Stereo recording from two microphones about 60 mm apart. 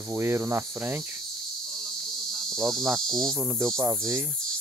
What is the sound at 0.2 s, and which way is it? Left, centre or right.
Speech, right.